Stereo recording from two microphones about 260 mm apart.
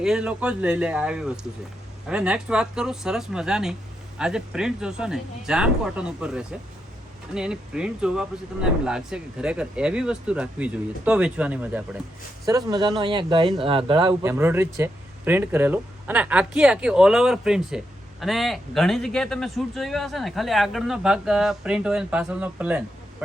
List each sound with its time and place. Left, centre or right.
0.0 s speech: centre